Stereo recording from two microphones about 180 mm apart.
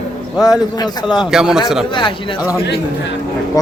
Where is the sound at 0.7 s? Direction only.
25° left (ahead or behind).